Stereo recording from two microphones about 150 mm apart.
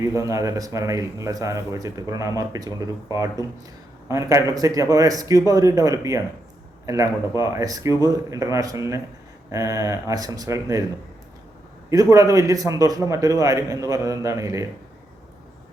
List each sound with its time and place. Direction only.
0.0 s speech: 20° right (ahead or behind)
11.9 s speech: 20° right (ahead or behind)